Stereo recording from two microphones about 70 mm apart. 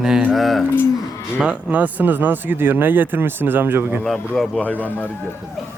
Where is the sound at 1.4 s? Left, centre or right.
Centre.